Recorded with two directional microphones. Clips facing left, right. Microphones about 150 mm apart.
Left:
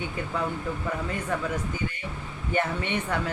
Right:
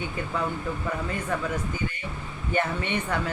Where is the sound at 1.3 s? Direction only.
15° left (ahead or behind).